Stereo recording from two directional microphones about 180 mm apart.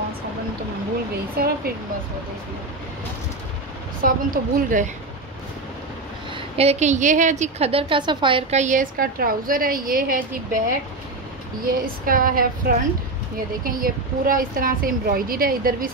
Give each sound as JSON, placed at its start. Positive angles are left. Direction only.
{"t": 1.3, "sound": "speech", "side_deg": -55}
{"t": 4.0, "sound": "a woman's voice", "side_deg": -50}
{"t": 6.3, "sound": "a woman's voice", "side_deg": -35}
{"t": 11.8, "sound": "a woman's voice", "side_deg": -50}